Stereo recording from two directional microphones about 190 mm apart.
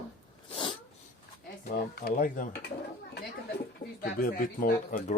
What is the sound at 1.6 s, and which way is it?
Speech, 50° left (ahead or behind).